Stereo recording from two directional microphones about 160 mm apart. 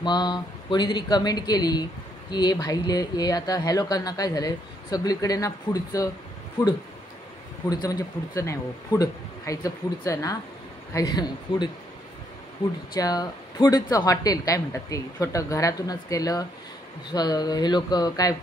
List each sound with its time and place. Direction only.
0.0 s speech: 25° left (ahead or behind)
7.7 s speech: 25° left (ahead or behind)
12.9 s speech: 25° left (ahead or behind)